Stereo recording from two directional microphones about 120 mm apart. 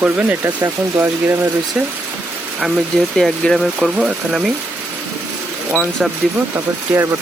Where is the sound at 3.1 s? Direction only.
5° left (ahead or behind).